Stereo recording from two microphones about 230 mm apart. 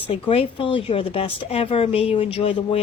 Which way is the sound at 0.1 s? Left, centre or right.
Left.